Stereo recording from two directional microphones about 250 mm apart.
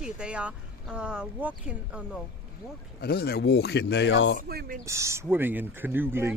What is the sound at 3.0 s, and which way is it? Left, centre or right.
Speech, left.